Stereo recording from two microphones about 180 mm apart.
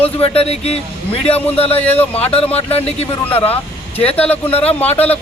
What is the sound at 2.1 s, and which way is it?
Speech, 35° left (ahead or behind).